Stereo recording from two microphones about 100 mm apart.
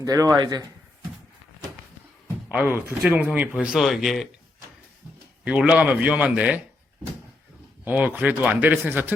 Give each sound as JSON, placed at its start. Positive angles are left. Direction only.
{"t": 0.0, "sound": "a man's voice", "side_deg": -35}
{"t": 2.5, "sound": "speech", "side_deg": -10}
{"t": 5.5, "sound": "speech", "side_deg": -10}
{"t": 7.9, "sound": "speech", "side_deg": -15}